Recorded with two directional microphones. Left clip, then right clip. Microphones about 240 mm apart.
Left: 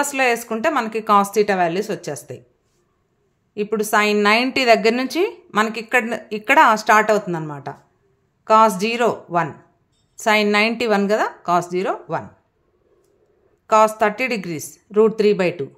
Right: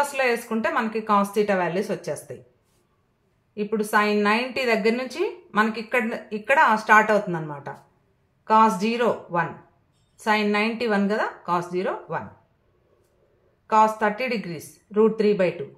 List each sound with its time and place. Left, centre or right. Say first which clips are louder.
0.1 s a woman's voice: left 4 dB; left
3.5 s a woman's voice: left 4 dB; left
13.7 s a woman's voice: left 4 dB; left